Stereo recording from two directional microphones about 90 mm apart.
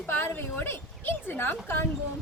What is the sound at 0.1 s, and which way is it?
A woman's voice, 25° left (ahead or behind).